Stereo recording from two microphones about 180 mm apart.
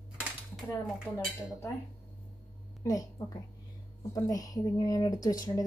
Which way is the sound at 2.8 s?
20° left (ahead or behind).